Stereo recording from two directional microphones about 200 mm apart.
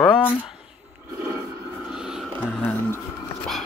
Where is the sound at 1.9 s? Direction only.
5° right (ahead or behind).